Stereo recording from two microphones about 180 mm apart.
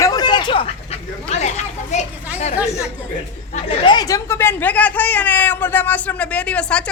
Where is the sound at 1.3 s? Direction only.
40° left (ahead or behind).